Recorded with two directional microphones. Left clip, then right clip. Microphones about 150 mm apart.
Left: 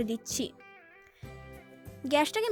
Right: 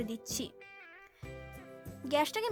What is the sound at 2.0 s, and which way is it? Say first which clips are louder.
Speech: left 4 dB; 25° left (ahead or behind).